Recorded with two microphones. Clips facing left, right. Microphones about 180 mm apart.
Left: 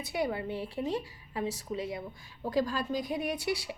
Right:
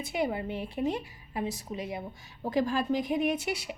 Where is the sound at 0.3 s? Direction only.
20° right (ahead or behind).